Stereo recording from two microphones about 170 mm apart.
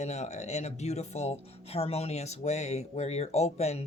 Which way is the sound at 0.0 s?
40° left (ahead or behind).